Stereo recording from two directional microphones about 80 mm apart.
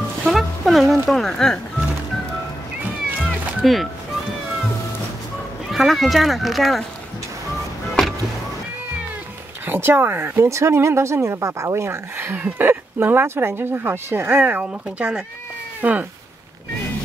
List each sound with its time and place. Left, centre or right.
0.2 s speech: centre
3.6 s music: centre
5.7 s speech: centre
8.0 s music: centre
9.7 s speech: right